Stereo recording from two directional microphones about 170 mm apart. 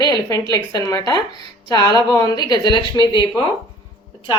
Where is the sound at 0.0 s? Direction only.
25° left (ahead or behind).